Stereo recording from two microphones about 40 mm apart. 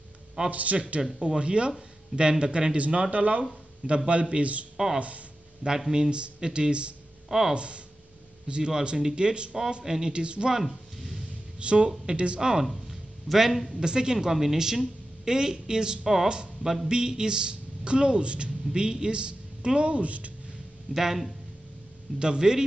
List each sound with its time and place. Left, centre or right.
0.5 s speech: right
1.2 s a woman's voice: right
5.9 s a woman's voice: right
7.2 s speech: centre
7.5 s a woman's voice: right
10.5 s a sound: centre
11.6 s a woman's voice: right
12.4 s a woman's voice: centre
12.6 s a sound: centre
13.7 s a woman's voice: centre; by 20.3 s right
20.9 s a woman's voice: centre
22.2 s a woman's voice: right